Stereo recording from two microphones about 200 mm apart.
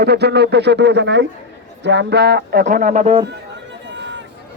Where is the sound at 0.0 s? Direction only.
55° right (ahead or behind); by 3.2 s 30° right (ahead or behind).